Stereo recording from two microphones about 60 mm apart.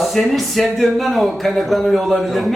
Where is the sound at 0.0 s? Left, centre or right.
Centre.